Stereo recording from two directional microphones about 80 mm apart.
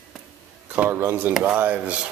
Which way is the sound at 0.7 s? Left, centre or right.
Right.